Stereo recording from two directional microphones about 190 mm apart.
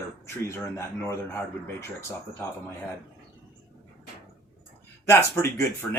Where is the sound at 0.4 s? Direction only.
15° left (ahead or behind).